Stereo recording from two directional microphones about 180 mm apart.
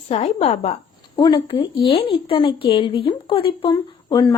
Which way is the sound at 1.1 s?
20° left (ahead or behind).